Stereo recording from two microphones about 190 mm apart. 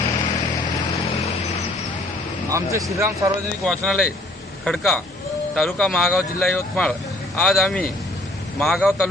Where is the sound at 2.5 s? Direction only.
15° right (ahead or behind).